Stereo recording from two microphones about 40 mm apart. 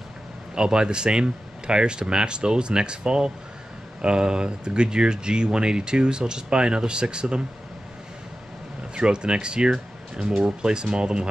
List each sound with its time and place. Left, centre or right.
0.6 s speech: right
8.9 s speech: right